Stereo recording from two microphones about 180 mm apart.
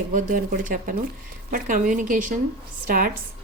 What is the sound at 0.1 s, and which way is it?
A woman's voice, 50° right (ahead or behind).